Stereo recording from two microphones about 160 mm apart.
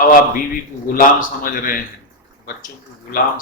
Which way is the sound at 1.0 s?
60° left (ahead or behind).